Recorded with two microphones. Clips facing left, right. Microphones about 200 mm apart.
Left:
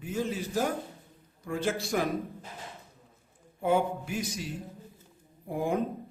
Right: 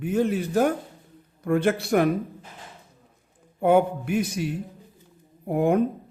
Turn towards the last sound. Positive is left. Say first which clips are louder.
# right 8 dB
turn(degrees=-60)  # may be behind; listen again after turning